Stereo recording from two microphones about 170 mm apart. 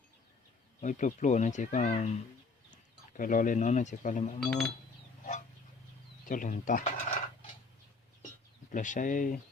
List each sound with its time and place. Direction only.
0.8 s speech: 45° left (ahead or behind)
4.4 s speech: 5° left (ahead or behind)
6.2 s speech: 50° left (ahead or behind)
8.7 s speech: 50° left (ahead or behind)